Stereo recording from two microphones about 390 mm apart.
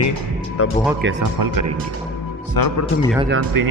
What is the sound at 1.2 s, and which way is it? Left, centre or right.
Speech, right.